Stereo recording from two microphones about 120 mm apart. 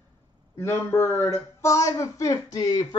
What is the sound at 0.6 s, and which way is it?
Speech, 20° left (ahead or behind).